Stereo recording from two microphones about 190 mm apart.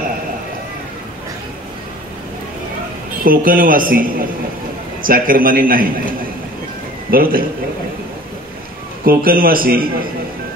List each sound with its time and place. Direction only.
3.3 s speech: 45° right (ahead or behind)
7.1 s speech: 50° right (ahead or behind)
9.0 s speech: 50° right (ahead or behind)